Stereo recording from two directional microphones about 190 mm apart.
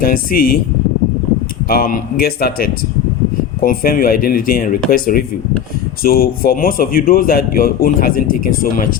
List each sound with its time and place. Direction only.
0.0 s speech: 50° left (ahead or behind)
1.7 s speech: 50° left (ahead or behind)